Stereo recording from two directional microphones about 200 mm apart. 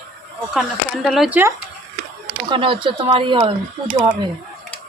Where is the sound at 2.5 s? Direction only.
25° right (ahead or behind).